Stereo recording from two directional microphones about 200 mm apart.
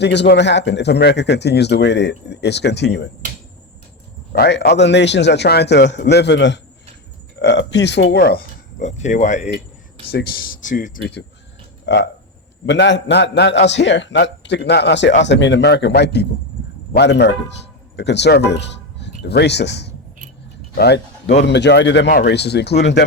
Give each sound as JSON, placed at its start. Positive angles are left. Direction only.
{"t": 0.0, "sound": "speech", "side_deg": 60}
{"t": 4.3, "sound": "speech", "side_deg": 55}
{"t": 8.8, "sound": "speech", "side_deg": 35}
{"t": 11.9, "sound": "speech", "side_deg": 60}